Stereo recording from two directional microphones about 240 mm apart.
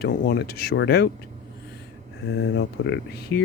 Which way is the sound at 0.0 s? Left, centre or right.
Left.